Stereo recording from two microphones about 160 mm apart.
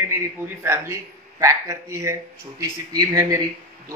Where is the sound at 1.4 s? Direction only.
20° right (ahead or behind).